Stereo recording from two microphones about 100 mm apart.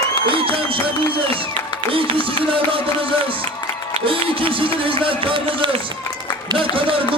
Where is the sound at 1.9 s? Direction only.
65° right (ahead or behind).